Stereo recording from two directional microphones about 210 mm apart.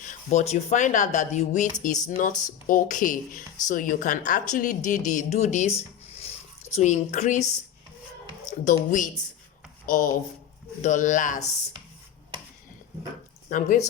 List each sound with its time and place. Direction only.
0.0 s speech: 35° left (ahead or behind)
6.7 s speech: 35° left (ahead or behind)
8.4 s speech: 40° left (ahead or behind)
13.5 s speech: 35° left (ahead or behind)